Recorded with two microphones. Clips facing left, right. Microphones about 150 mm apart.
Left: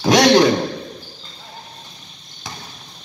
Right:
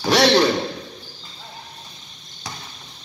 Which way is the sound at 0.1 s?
15° left (ahead or behind).